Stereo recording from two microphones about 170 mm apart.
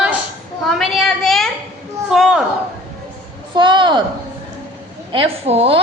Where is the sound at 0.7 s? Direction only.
Centre (ahead or behind).